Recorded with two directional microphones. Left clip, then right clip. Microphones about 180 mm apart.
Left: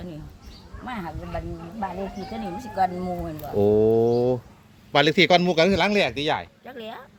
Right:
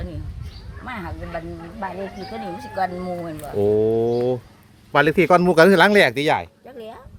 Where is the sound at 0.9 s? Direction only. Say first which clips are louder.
Right 2 dB; centre (ahead or behind).